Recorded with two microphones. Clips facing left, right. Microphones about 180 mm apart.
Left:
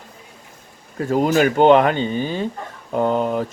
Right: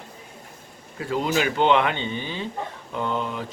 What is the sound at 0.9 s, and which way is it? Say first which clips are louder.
Speech: left 7 dB; 45° left (ahead or behind).